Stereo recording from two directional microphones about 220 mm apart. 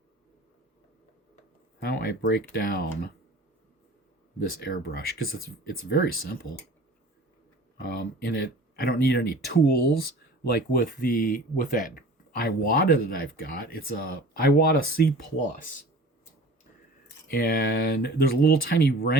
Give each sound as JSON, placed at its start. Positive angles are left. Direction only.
{"t": 1.8, "sound": "speech", "side_deg": 45}
{"t": 4.7, "sound": "speech", "side_deg": 40}
{"t": 7.9, "sound": "speech", "side_deg": 45}
{"t": 17.3, "sound": "speech", "side_deg": 40}